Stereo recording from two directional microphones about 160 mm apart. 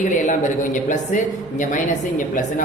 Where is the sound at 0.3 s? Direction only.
50° left (ahead or behind).